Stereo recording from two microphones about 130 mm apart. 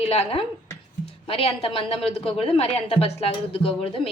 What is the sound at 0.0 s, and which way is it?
Speech, 50° left (ahead or behind).